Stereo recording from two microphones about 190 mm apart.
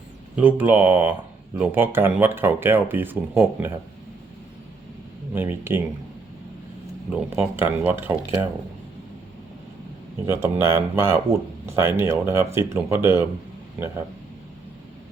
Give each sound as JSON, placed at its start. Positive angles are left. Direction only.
{"t": 0.3, "sound": "speech", "side_deg": -10}
{"t": 5.3, "sound": "speech", "side_deg": -10}
{"t": 7.1, "sound": "speech", "side_deg": -10}
{"t": 10.2, "sound": "speech", "side_deg": -15}